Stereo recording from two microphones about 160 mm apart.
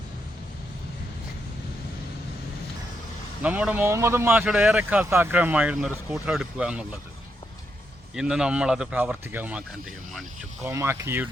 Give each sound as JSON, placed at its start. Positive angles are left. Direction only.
{"t": 3.4, "sound": "speech", "side_deg": -10}
{"t": 8.1, "sound": "speech", "side_deg": -5}